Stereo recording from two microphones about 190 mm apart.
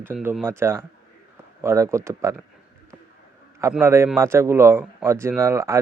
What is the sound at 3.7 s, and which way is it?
Speech, 15° right (ahead or behind).